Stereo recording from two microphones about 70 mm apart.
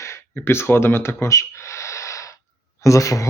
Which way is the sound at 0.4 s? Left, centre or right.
Left.